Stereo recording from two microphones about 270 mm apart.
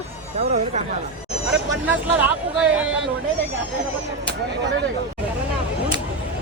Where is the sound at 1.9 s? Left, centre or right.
Centre.